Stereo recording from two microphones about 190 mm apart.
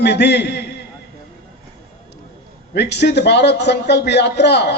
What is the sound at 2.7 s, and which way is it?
A man's voice, 65° left (ahead or behind).